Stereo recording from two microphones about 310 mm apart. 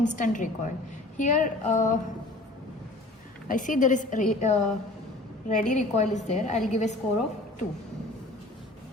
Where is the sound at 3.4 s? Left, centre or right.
Left.